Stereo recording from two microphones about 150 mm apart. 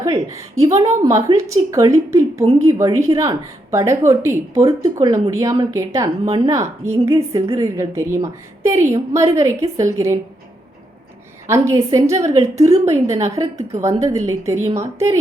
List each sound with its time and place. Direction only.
0.3 s a woman's voice: 20° right (ahead or behind)
6.2 s speech: 35° right (ahead or behind)
6.5 s a woman's voice: 20° right (ahead or behind)
11.4 s a woman's voice: 20° right (ahead or behind)
12.1 s a woman's voice: 50° right (ahead or behind)
12.8 s a woman's voice: 20° right (ahead or behind)